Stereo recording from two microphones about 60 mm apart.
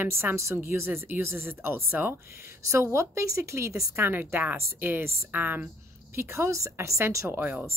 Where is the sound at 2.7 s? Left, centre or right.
Right.